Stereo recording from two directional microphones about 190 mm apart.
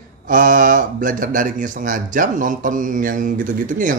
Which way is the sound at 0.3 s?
45° right (ahead or behind).